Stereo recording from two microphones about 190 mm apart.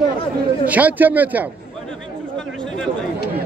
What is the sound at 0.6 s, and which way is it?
Speech, 10° right (ahead or behind).